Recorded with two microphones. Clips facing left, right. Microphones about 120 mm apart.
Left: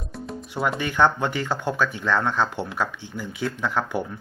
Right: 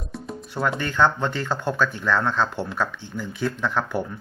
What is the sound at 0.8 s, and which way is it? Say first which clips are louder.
Speech: left 1 dB; 15° left (ahead or behind).